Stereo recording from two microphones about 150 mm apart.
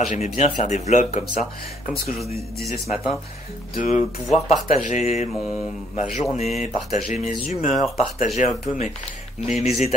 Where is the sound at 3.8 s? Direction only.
50° left (ahead or behind).